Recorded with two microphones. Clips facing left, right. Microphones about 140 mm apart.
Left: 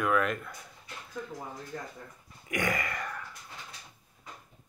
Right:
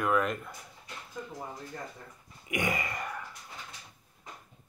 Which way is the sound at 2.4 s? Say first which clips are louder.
Even; 20° right (ahead or behind).